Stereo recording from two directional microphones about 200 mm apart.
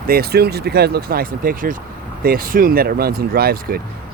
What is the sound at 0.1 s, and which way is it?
Speech, 50° right (ahead or behind).